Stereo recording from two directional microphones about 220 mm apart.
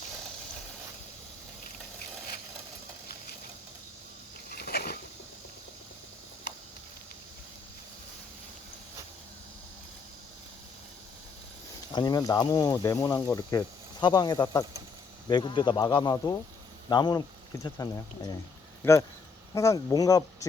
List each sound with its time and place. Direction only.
4.5 s a sound: 45° left (ahead or behind)
11.9 s speech: 20° left (ahead or behind)
19.5 s speech: 15° left (ahead or behind)